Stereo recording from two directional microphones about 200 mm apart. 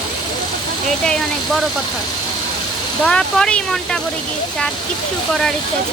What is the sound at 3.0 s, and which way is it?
Speech, 5° left (ahead or behind).